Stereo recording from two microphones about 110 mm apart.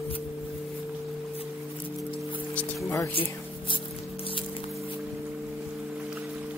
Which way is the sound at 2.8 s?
20° left (ahead or behind).